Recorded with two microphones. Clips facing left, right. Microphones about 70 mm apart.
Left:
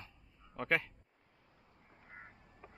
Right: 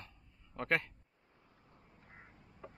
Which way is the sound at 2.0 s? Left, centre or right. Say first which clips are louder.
Left 5 dB; left.